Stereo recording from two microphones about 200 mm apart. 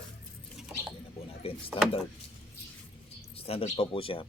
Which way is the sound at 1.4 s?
30° left (ahead or behind).